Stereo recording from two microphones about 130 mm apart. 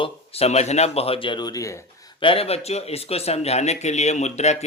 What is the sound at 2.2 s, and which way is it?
Speech, 45° left (ahead or behind).